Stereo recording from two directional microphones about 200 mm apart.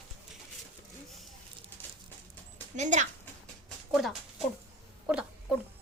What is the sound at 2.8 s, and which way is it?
Speech, 40° right (ahead or behind).